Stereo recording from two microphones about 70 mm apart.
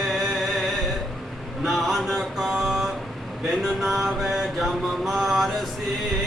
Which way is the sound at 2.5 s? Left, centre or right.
Centre.